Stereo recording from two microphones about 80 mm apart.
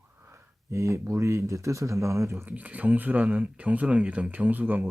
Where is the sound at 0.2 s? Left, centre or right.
Right.